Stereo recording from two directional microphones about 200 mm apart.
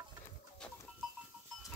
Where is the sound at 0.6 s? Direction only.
5° left (ahead or behind).